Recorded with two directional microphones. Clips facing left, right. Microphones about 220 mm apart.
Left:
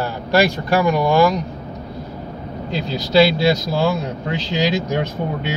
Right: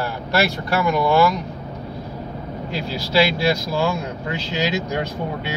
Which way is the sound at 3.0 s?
20° left (ahead or behind).